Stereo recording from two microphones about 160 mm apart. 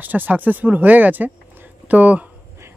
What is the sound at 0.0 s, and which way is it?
Speech, 10° right (ahead or behind).